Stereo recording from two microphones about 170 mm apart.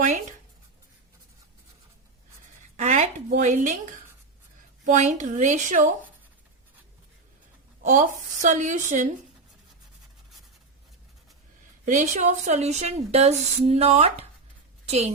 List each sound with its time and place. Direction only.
0.0 s writing: 45° right (ahead or behind)
2.7 s a sound: 45° right (ahead or behind)
4.9 s speech: 45° right (ahead or behind)
7.9 s speech: 45° right (ahead or behind)
11.9 s a woman's voice: 45° right (ahead or behind)